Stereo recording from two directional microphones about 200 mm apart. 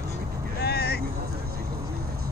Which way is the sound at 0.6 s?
55° left (ahead or behind).